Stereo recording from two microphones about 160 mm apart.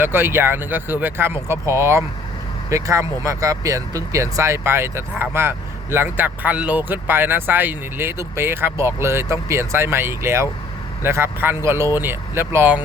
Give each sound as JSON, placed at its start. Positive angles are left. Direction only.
{"t": 0.0, "sound": "speech", "side_deg": -15}